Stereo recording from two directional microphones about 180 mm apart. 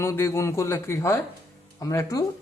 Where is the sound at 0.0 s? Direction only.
15° left (ahead or behind).